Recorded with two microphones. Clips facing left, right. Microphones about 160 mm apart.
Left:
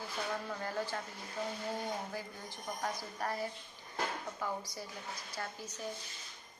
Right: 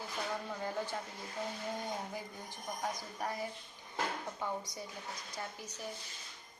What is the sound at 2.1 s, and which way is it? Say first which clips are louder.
A woman's voice: left 1 dB; 15° right (ahead or behind).